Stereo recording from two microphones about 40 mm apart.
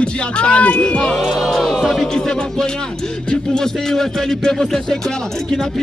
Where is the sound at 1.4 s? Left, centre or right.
Centre.